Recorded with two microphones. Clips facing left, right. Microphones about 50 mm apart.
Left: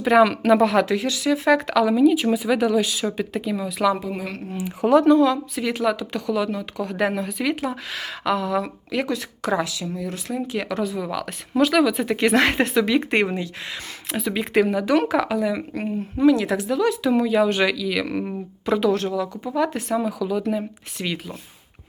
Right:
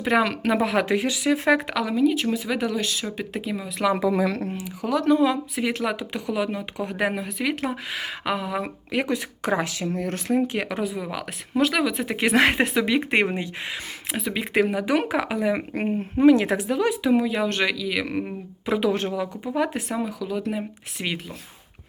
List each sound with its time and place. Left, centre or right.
0.0 s speech: centre
0.8 s speech: right
1.8 s speech: centre
2.5 s speech: centre
3.3 s speech: centre
5.0 s speech: centre
7.0 s speech: centre; by 10.2 s right
10.2 s speech: right; by 13.3 s centre
13.3 s speech: right
14.1 s speech: centre
15.5 s speech: right
17.1 s speech: centre
18.9 s speech: right
20.0 s speech: centre